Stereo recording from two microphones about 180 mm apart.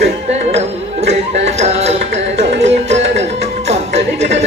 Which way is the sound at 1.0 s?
35° right (ahead or behind).